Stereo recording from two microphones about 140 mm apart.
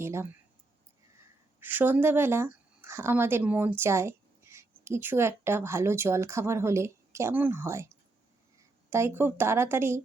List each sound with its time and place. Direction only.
0.0 s speech: 20° right (ahead or behind)
8.9 s speech: 15° right (ahead or behind)